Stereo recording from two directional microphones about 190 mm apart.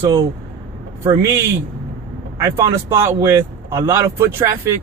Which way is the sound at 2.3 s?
15° right (ahead or behind).